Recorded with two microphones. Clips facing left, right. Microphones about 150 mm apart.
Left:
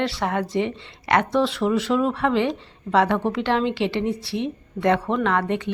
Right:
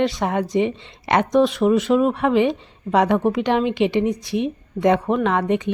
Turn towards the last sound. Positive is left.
turn(degrees=-15)  # may be behind; listen again after turning